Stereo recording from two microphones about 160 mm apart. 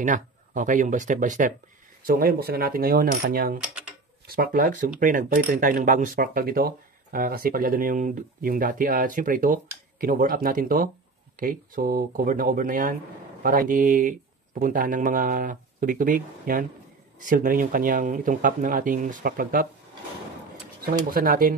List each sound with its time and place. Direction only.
0.0 s speech: 55° right (ahead or behind)
2.0 s speech: 70° right (ahead or behind)
20.8 s speech: 65° right (ahead or behind)